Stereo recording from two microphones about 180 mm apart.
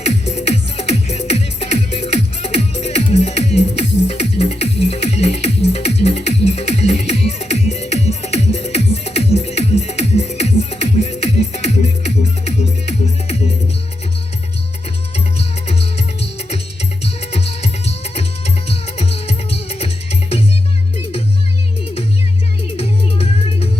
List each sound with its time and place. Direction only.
0.0 s music: 35° left (ahead or behind)
15.4 s music: 35° left (ahead or behind)
22.8 s music: 35° left (ahead or behind)